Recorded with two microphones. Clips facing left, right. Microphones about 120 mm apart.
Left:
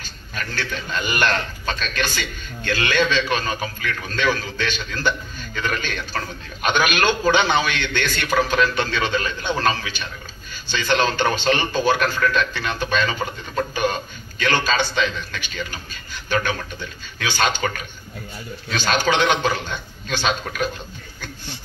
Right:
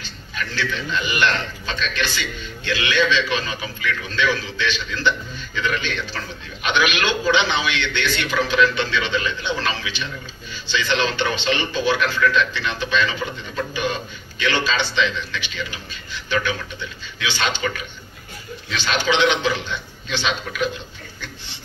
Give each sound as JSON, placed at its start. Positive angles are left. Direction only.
{"t": 0.0, "sound": "a man's voice", "side_deg": 45}